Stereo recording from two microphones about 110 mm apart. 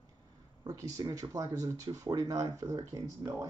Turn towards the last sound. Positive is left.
turn(degrees=-25)  # may be behind; listen again after turning